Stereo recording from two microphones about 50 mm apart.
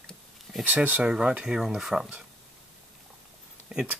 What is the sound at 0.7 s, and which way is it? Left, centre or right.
Speech, right.